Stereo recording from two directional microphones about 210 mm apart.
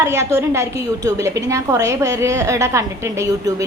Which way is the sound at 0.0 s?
15° right (ahead or behind).